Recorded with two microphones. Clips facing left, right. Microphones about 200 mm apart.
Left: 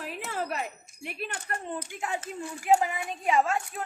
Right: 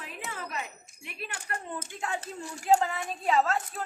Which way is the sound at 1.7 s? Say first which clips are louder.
Left 2 dB; 15° left (ahead or behind).